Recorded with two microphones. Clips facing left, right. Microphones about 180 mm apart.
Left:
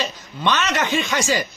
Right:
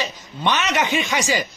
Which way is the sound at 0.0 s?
15° right (ahead or behind).